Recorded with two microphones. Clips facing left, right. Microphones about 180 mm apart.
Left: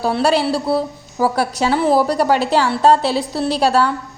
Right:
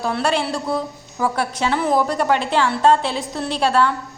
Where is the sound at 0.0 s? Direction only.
35° left (ahead or behind).